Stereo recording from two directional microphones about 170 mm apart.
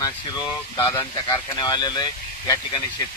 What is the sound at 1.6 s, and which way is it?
Speech, 25° left (ahead or behind).